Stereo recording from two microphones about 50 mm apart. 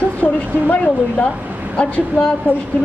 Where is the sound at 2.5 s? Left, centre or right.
Right.